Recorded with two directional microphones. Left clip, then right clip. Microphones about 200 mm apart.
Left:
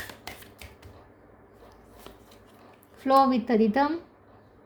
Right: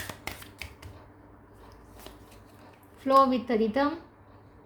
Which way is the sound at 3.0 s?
40° left (ahead or behind).